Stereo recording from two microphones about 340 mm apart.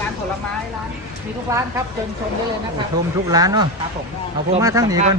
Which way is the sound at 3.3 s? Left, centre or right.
Centre.